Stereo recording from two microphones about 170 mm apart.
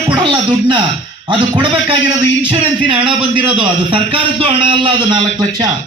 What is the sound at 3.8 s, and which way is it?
A man's voice, 30° right (ahead or behind).